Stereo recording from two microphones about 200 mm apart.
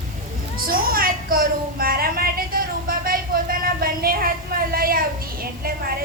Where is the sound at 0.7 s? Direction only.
45° right (ahead or behind).